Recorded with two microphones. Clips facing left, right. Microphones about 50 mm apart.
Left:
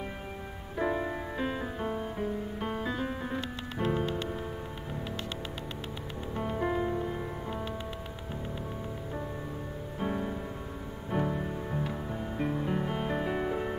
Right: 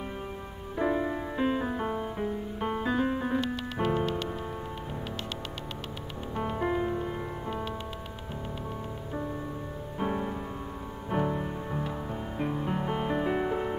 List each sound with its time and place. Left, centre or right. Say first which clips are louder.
0.7 s music: right 3 dB; centre
1.4 s music: right 6 dB; centre
6.3 s music: right 2 dB; centre
9.9 s music: right 2 dB; centre